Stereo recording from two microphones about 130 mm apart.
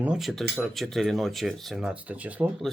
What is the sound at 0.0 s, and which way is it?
Speech, 5° right (ahead or behind).